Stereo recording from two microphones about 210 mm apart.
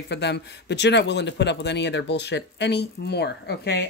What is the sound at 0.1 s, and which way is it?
A man's voice, 55° left (ahead or behind).